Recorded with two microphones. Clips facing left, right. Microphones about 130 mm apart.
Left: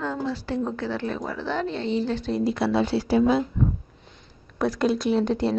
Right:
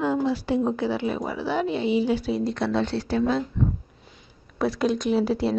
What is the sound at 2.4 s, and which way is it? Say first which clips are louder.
Speech: left 2 dB; 5° left (ahead or behind).